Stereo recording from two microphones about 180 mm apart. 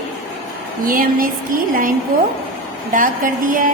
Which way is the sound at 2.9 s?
50° right (ahead or behind).